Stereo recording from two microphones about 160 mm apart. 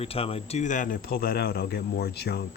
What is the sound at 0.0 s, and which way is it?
Speech, 35° left (ahead or behind).